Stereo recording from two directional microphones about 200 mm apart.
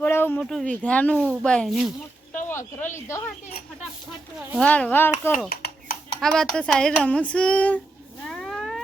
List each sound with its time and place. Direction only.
0.0 s a sound: 10° left (ahead or behind)
0.8 s speech: 5° left (ahead or behind)
2.3 s speech: 10° left (ahead or behind)
4.4 s speech: 5° right (ahead or behind)
4.7 s a child's voice: 10° left (ahead or behind)
5.5 s dishes: 50° left (ahead or behind)
6.1 s speech: centre (ahead or behind)
8.3 s a sound: centre (ahead or behind)